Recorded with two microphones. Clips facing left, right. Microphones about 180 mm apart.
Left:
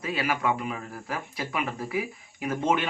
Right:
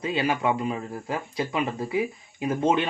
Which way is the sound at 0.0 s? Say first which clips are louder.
Right 3 dB; 25° right (ahead or behind).